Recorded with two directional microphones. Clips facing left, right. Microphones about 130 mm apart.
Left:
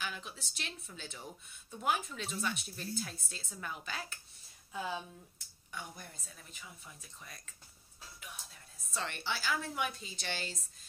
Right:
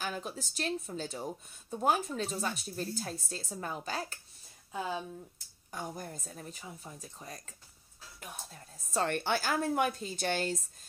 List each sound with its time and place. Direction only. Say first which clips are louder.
0.0 s speech: right 6 dB; 40° right (ahead or behind)
4.7 s speech: right 3 dB; 20° right (ahead or behind)
5.7 s a woman's voice: right 7 dB; 40° right (ahead or behind)